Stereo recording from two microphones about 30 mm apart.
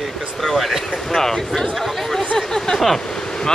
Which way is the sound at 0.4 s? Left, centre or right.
Centre.